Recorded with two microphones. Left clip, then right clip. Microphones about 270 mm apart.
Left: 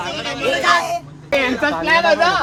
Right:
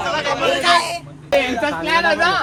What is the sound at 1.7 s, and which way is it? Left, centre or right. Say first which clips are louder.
Speech: left 3 dB; left.